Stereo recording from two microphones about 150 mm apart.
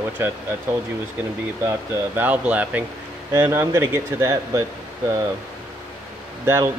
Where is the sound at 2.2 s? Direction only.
10° right (ahead or behind).